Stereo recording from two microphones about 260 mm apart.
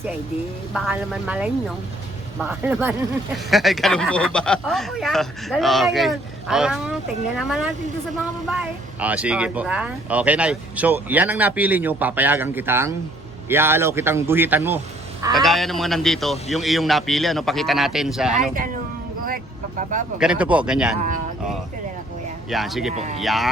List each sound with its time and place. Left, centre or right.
0.7 s speech: centre
20.1 s speech: centre
22.4 s speech: centre
22.9 s speech: right
23.2 s speech: centre